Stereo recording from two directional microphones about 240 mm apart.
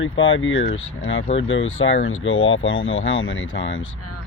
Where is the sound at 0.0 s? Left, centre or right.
Left.